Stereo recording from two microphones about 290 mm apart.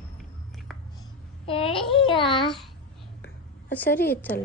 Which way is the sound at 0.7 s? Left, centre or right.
Centre.